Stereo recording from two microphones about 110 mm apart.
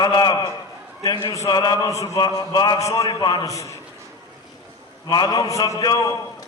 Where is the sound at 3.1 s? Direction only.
40° left (ahead or behind).